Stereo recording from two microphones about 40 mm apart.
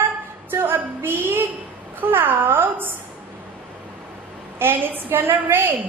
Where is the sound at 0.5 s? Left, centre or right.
Right.